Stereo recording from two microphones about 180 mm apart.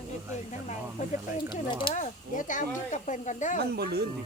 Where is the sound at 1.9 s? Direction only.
45° left (ahead or behind).